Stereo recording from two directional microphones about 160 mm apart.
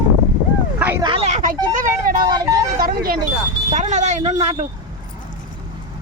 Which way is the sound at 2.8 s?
65° right (ahead or behind).